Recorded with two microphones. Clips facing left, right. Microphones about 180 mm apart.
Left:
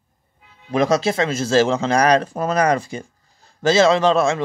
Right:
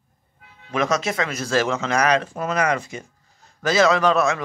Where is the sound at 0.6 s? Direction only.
30° left (ahead or behind).